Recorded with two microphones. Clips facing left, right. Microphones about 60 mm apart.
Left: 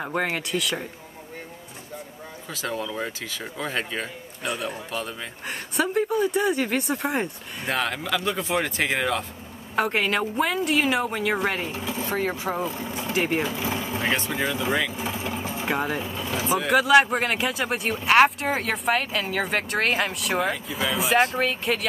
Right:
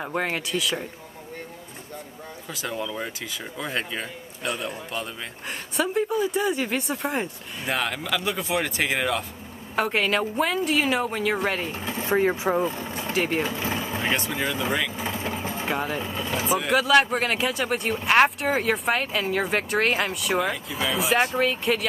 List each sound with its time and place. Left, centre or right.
0.0 s a man's voice: centre
2.5 s a man's voice: centre
11.7 s a sound: right
12.2 s speech: centre
12.6 s speech: right
13.1 s speech: centre
13.6 s vehicle: right
14.3 s speech: centre
15.0 s vehicle: right
15.7 s a man's voice: centre